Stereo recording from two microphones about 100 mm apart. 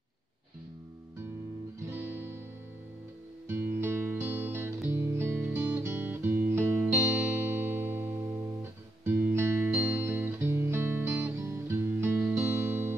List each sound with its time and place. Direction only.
1.9 s music: 25° right (ahead or behind)
3.4 s music: 25° right (ahead or behind)